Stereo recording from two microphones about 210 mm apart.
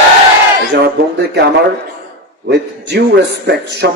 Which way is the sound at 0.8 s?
50° right (ahead or behind).